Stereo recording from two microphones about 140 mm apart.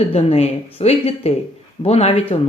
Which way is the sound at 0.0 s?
45° left (ahead or behind).